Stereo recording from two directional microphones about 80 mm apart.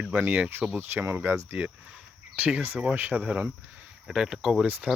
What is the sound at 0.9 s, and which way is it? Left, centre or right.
Speech, right.